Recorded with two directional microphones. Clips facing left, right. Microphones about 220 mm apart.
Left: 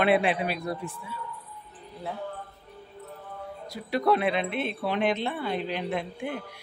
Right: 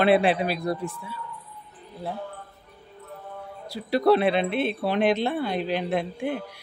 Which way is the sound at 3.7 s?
35° right (ahead or behind).